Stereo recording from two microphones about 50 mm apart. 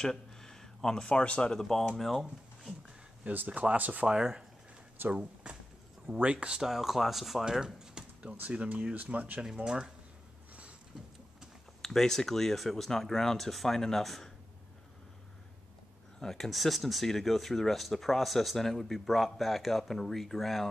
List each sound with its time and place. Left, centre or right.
0.0 s a sound: centre
1.0 s speech: left
1.6 s speech: centre
3.3 s speech: right
4.1 s speech: centre
6.6 s speech: centre
8.3 s speech: right
11.8 s speech: centre
16.2 s speech: centre